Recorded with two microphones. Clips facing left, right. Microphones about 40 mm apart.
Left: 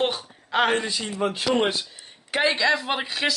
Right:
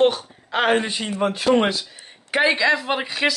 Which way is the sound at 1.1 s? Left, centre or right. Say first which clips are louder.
Right 6 dB; right.